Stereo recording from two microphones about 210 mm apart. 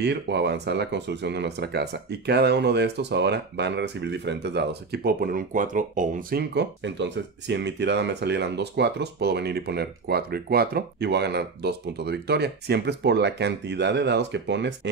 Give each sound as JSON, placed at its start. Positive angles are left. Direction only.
{"t": 0.0, "sound": "speech", "side_deg": -55}